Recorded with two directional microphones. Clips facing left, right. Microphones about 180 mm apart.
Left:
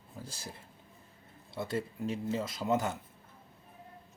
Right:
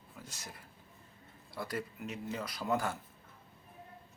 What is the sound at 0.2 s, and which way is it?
A man's voice, 30° left (ahead or behind).